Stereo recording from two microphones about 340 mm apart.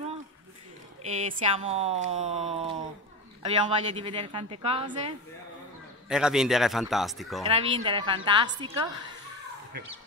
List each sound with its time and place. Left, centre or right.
1.2 s a woman's voice: centre
6.0 s a man's voice: centre
7.4 s a woman's voice: centre